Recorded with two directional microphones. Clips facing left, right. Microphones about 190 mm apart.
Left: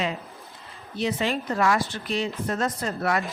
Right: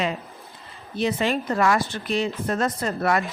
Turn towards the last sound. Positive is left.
turn(degrees=-55)  # may be behind; listen again after turning